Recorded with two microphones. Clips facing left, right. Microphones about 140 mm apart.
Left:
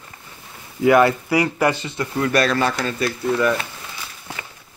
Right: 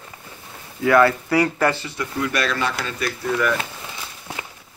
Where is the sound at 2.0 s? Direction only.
40° left (ahead or behind).